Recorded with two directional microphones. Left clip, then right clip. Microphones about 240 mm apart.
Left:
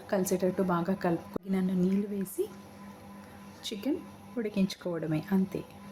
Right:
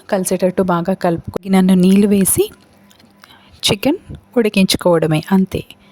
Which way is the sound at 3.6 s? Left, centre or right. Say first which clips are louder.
Right 18 dB; right.